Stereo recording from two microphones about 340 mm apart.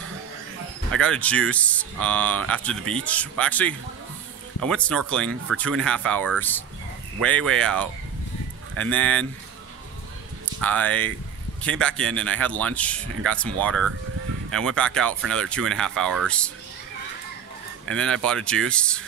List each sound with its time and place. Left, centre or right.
1.0 s speech: centre
10.6 s speech: centre
17.8 s speech: centre